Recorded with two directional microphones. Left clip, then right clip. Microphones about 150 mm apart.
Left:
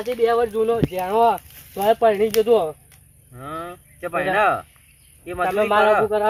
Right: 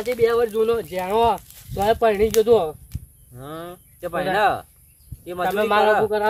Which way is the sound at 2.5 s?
5° right (ahead or behind).